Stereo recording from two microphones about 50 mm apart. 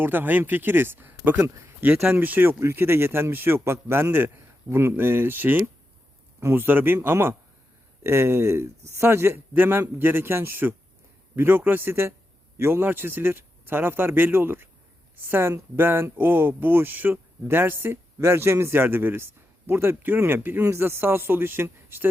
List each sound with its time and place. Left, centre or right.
0.0 s speech: right
9.0 s a man's voice: right
12.8 s speech: right
20.0 s speech: right
20.6 s speech: right